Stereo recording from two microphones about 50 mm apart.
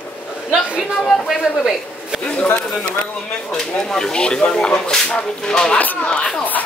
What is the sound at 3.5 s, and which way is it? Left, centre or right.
Speech, centre.